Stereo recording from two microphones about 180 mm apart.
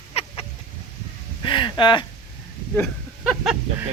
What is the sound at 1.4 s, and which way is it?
Speech, 25° left (ahead or behind).